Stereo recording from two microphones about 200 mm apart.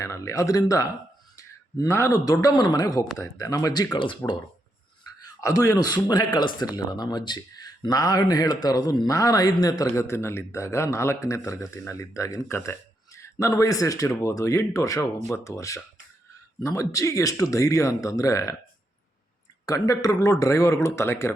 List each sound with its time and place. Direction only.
0.0 s a man's voice: 15° left (ahead or behind)
1.4 s a sound: 15° left (ahead or behind)
2.2 s a man's voice: 20° left (ahead or behind)
5.2 s a man's voice: 15° left (ahead or behind)
19.6 s a man's voice: 15° left (ahead or behind)